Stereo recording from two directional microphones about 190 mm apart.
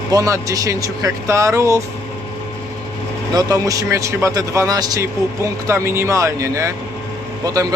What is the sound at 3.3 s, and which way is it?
Speech, 20° right (ahead or behind).